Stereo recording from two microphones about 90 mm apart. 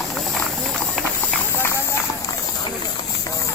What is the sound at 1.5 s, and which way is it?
Run, 30° left (ahead or behind).